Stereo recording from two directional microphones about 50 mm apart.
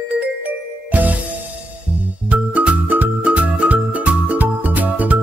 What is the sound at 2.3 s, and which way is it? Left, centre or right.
Music, right.